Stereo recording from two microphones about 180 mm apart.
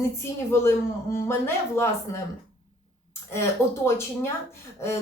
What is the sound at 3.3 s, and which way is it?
Speech, 15° left (ahead or behind).